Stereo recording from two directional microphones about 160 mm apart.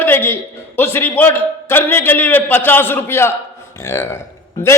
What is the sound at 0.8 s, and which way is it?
A man's voice, 15° left (ahead or behind).